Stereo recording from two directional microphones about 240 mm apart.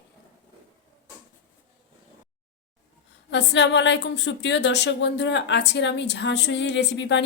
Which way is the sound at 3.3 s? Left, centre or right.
Left.